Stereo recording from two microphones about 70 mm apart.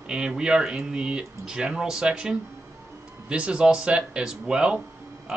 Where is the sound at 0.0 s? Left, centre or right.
Centre.